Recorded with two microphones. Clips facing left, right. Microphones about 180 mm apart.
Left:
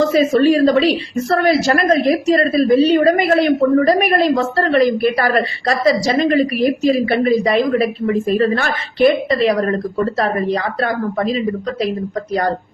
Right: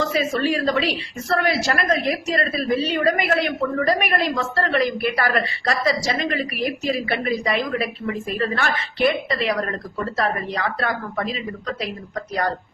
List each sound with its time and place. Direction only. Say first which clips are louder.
0.1 s a woman's voice: left 9 dB; 35° left (ahead or behind)